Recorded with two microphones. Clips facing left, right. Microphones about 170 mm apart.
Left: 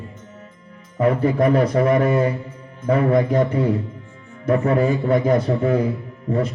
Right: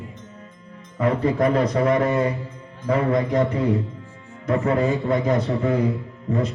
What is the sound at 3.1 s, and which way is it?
A man's voice, 30° left (ahead or behind).